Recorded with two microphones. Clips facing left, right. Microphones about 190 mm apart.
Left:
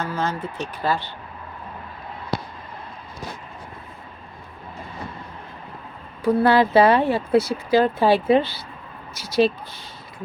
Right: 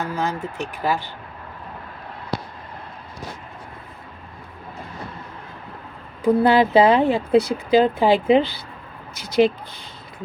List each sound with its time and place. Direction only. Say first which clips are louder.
0.0 s speech: right 1 dB; 15° right (ahead or behind)
6.2 s speech: right 1 dB; 15° right (ahead or behind)